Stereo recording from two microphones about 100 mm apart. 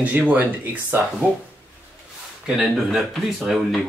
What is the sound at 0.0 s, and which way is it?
Speech, 15° right (ahead or behind).